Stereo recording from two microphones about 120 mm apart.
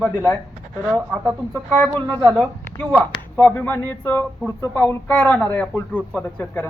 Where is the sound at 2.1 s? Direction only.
40° right (ahead or behind).